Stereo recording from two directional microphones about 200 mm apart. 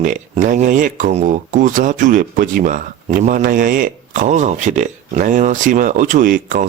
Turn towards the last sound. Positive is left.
turn(degrees=-40)  # may be behind; listen again after turning